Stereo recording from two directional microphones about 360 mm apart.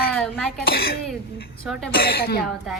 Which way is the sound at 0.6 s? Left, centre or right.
Left.